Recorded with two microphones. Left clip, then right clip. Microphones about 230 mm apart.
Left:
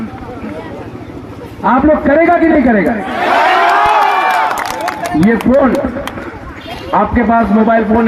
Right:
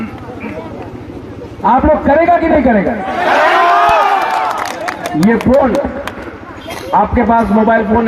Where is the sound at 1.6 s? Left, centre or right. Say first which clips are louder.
Even; left.